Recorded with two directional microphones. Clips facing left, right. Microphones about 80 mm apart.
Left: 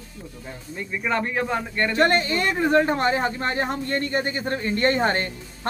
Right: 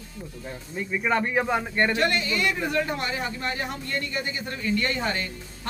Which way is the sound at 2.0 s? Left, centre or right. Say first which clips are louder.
Left 5 dB; left.